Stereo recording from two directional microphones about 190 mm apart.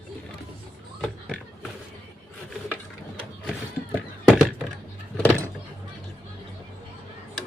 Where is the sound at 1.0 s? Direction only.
Centre (ahead or behind).